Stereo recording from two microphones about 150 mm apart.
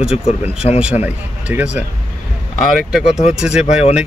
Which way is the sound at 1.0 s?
10° right (ahead or behind).